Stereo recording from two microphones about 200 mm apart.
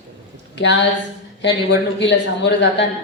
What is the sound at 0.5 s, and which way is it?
A woman's voice, 60° left (ahead or behind).